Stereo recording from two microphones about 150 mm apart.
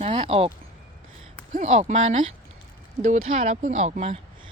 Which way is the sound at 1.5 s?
50° right (ahead or behind).